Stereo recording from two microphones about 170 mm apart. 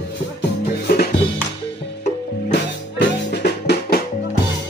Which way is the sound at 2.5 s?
85° left.